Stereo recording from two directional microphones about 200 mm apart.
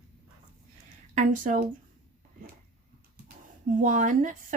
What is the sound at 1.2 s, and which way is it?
Speech, 40° right (ahead or behind).